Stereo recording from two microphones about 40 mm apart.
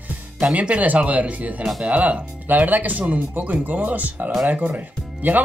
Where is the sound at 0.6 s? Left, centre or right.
Right.